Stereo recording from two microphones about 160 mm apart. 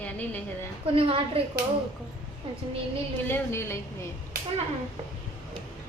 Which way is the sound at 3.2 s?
15° left (ahead or behind).